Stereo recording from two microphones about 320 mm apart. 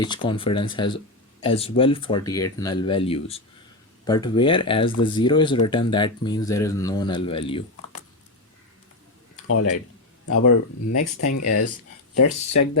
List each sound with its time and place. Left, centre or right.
0.0 s speech: centre
10.2 s speech: left